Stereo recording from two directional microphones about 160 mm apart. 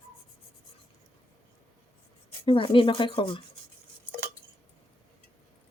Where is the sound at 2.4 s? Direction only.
30° left (ahead or behind).